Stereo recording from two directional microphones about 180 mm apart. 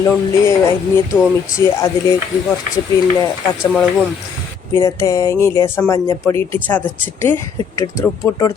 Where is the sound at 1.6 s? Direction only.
15° left (ahead or behind).